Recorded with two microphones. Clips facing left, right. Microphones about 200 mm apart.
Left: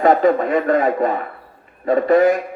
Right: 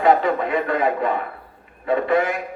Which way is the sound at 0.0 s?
45° left (ahead or behind).